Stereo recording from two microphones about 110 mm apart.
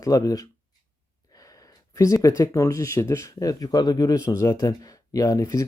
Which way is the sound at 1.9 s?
30° left (ahead or behind).